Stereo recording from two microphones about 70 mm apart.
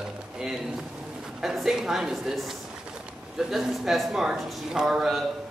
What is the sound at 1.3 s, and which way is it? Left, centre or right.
A man's voice, centre.